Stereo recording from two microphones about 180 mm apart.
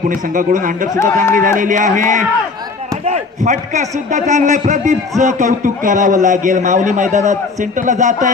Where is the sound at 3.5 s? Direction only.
40° right (ahead or behind).